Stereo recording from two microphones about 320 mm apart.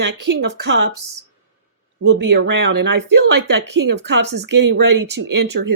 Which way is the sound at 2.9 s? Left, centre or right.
Right.